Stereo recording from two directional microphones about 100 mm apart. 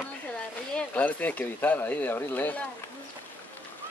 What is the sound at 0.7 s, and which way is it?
Speech, 15° left (ahead or behind).